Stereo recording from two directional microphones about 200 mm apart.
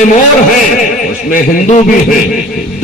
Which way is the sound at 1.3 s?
40° left (ahead or behind).